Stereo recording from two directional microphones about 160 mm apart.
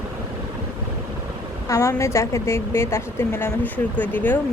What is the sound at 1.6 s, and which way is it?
A woman's voice, 20° left (ahead or behind).